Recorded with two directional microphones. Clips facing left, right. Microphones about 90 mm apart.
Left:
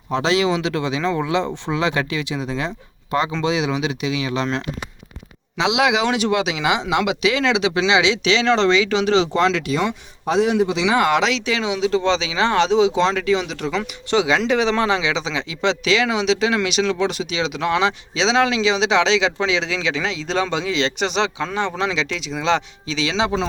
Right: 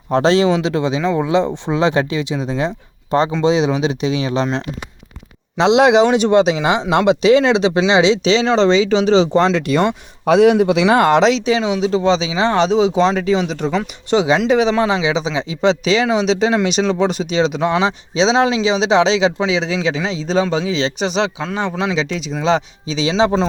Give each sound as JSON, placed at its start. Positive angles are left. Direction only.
{"t": 0.1, "sound": "speech", "side_deg": -40}
{"t": 5.5, "sound": "speech", "side_deg": -40}
{"t": 8.4, "sound": "speech", "side_deg": -20}
{"t": 9.6, "sound": "speech", "side_deg": -60}
{"t": 11.2, "sound": "speech", "side_deg": -25}
{"t": 20.3, "sound": "speech", "side_deg": -5}
{"t": 20.7, "sound": "speech", "side_deg": 90}
{"t": 21.5, "sound": "speech", "side_deg": -10}
{"t": 23.1, "sound": "speech", "side_deg": -35}